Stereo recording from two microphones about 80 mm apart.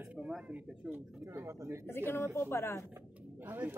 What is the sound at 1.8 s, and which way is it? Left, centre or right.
A woman's voice, left.